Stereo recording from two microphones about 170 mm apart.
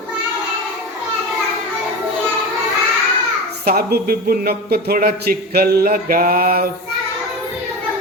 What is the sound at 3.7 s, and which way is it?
Speech, 65° right (ahead or behind).